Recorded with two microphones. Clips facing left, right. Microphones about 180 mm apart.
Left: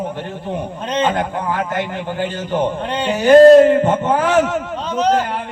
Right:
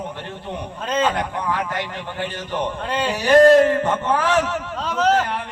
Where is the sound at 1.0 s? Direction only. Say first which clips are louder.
Left 3 dB; 30° left (ahead or behind).